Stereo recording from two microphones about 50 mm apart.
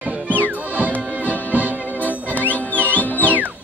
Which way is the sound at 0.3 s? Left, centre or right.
Right.